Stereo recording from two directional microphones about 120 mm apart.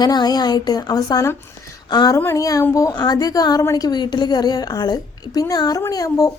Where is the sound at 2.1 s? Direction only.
25° left (ahead or behind).